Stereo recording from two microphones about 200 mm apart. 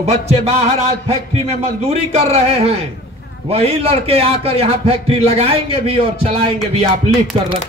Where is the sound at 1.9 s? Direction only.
30° right (ahead or behind).